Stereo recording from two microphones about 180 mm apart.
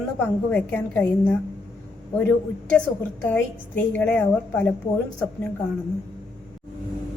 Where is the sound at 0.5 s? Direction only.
10° left (ahead or behind).